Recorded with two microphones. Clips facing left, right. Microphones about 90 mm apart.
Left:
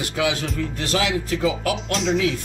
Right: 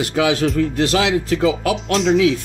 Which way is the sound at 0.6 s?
90° right.